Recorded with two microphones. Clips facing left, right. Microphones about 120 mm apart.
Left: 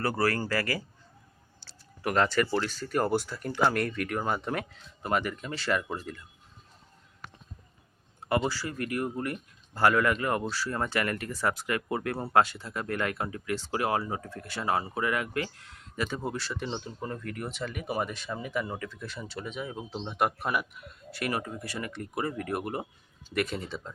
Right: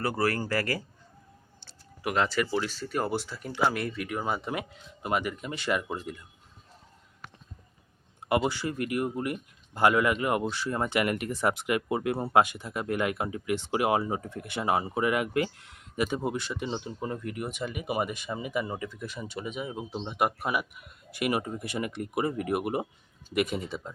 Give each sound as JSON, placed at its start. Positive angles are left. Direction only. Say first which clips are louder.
{"t": 0.0, "sound": "speech", "louder": "even", "side_deg": -20}
{"t": 2.1, "sound": "speech", "louder": "left 1 dB", "side_deg": -5}
{"t": 8.4, "sound": "speech", "louder": "right 2 dB", "side_deg": -20}